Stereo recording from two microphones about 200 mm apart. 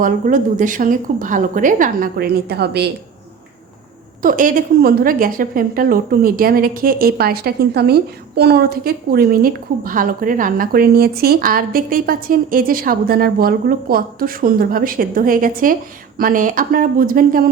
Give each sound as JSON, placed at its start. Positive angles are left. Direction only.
{"t": 0.0, "sound": "a woman's voice", "side_deg": -40}
{"t": 4.2, "sound": "a woman's voice", "side_deg": -40}